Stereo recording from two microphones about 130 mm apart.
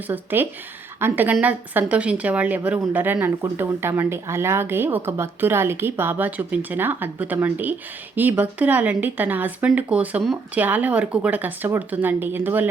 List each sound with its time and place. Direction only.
0.1 s speech: 15° right (ahead or behind)